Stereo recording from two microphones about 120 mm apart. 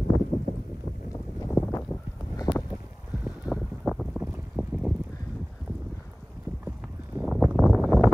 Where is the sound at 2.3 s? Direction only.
30° left (ahead or behind).